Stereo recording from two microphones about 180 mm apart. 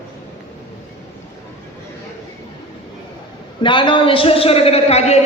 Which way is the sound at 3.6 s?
25° left (ahead or behind).